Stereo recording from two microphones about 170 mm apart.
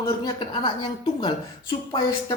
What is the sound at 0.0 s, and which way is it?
A woman's voice, 20° left (ahead or behind).